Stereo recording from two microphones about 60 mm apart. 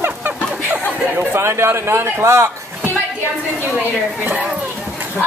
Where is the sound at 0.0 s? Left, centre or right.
Right.